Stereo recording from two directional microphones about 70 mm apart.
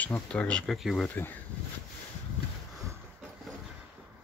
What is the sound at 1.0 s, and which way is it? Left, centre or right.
Speech, left.